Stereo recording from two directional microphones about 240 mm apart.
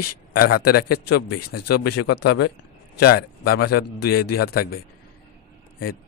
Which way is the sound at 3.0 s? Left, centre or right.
Left.